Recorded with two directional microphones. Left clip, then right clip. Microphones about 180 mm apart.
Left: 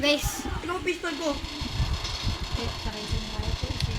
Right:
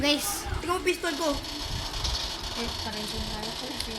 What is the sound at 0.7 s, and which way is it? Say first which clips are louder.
Speech: right 4 dB; 55° right (ahead or behind).